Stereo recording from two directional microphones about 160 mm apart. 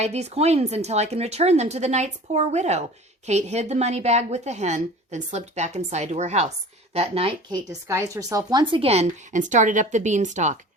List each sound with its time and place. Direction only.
0.0 s a woman's voice: 45° right (ahead or behind)
7.7 s speech: 20° right (ahead or behind); by 10.6 s 50° right (ahead or behind)